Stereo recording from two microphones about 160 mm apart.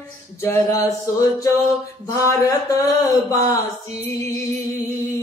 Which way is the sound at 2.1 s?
20° left (ahead or behind).